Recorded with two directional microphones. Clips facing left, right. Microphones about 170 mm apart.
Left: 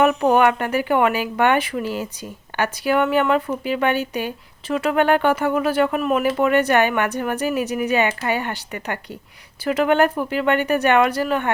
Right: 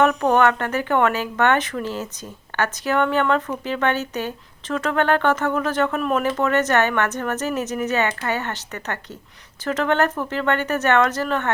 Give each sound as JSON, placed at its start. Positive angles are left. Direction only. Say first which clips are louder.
{"t": 0.0, "sound": "speech", "louder": "left 1 dB", "side_deg": 10}